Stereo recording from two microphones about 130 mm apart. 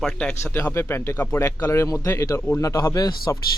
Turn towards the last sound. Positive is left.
turn(degrees=30)  # may be behind; listen again after turning